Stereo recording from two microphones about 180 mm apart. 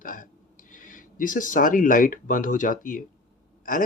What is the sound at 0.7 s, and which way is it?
Speech, 50° left (ahead or behind).